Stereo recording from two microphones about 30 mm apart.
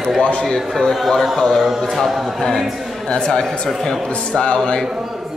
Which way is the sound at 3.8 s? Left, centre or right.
Left.